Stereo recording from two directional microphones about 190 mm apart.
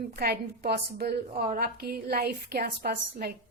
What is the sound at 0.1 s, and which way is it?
A woman's voice, 50° right (ahead or behind).